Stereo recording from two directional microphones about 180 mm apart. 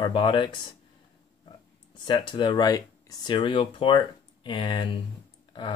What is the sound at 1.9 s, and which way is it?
Speech, 25° left (ahead or behind).